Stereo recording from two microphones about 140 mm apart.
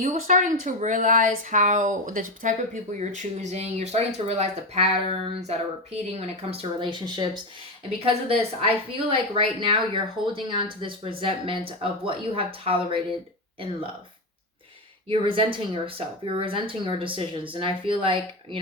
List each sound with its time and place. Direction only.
0.0 s speech: 65° right (ahead or behind)
3.0 s speech: 55° right (ahead or behind); by 13.0 s 40° right (ahead or behind)
15.1 s speech: 40° right (ahead or behind)